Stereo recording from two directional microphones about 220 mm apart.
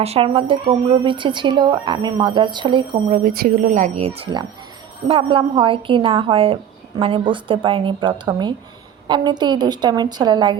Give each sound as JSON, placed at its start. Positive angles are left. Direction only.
{"t": 0.0, "sound": "a woman's voice", "side_deg": -25}
{"t": 3.1, "sound": "a woman's voice", "side_deg": -40}